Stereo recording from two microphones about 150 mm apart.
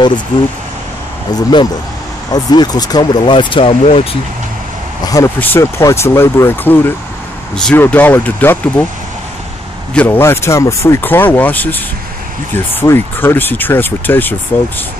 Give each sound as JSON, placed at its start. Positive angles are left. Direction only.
{"t": 1.3, "sound": "speech", "side_deg": 30}
{"t": 5.0, "sound": "vehicle", "side_deg": 25}
{"t": 5.4, "sound": "speech", "side_deg": 15}
{"t": 9.9, "sound": "speech", "side_deg": 15}